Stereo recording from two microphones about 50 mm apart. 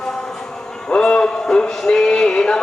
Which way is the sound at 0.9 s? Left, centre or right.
Centre.